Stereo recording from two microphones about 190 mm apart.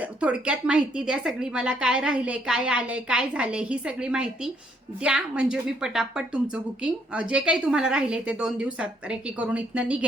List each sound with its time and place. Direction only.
0.0 s a woman's voice: 5° right (ahead or behind)